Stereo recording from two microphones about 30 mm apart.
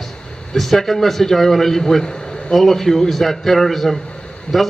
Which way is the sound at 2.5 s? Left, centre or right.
Centre.